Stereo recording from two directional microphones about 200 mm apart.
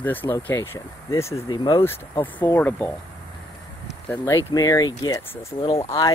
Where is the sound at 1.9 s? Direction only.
10° left (ahead or behind).